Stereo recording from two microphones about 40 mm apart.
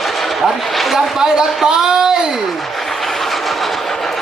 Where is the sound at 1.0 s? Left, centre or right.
Centre.